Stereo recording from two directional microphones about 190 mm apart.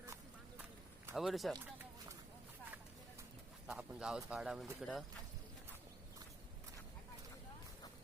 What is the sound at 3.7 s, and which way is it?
Speech, 5° right (ahead or behind).